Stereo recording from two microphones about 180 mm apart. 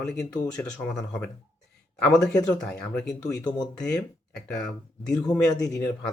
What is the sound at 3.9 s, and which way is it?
Speech, 5° left (ahead or behind).